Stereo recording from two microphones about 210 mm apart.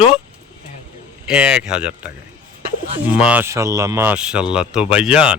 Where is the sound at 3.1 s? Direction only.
5° right (ahead or behind).